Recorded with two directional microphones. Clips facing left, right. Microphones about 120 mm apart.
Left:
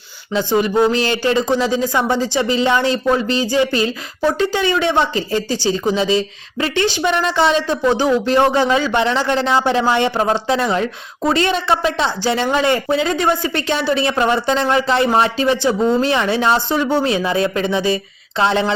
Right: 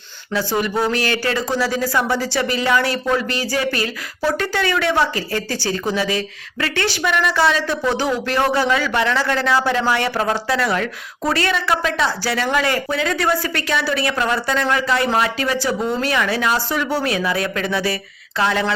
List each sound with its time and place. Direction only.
0.3 s speech: 20° left (ahead or behind)